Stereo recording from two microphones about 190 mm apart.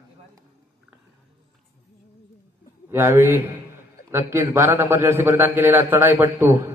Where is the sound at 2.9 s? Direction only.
10° right (ahead or behind).